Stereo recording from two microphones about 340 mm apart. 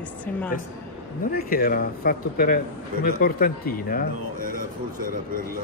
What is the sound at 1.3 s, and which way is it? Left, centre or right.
Speech, left.